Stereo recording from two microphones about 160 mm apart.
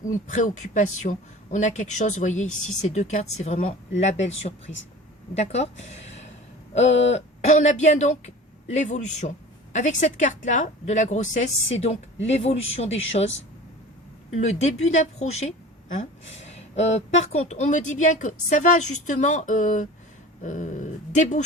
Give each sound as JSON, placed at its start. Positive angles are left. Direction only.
{"t": 0.0, "sound": "speech", "side_deg": 50}
{"t": 14.3, "sound": "speech", "side_deg": 45}
{"t": 16.4, "sound": "speech", "side_deg": 40}